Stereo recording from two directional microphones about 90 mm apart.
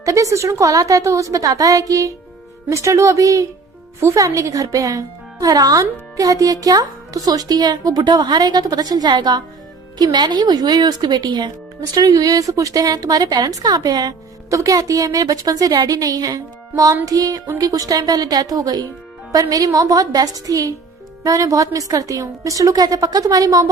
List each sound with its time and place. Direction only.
0.0 s a woman's voice: 40° right (ahead or behind); by 11.5 s 55° right (ahead or behind)
11.9 s a woman's voice: 45° right (ahead or behind)